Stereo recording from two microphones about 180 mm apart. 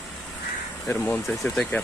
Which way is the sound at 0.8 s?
10° left (ahead or behind).